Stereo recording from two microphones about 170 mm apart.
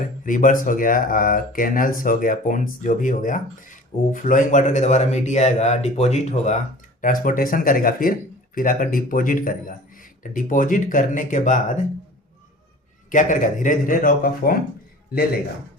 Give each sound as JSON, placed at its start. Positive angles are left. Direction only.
{"t": 0.0, "sound": "speech", "side_deg": 50}
{"t": 13.1, "sound": "speech", "side_deg": 50}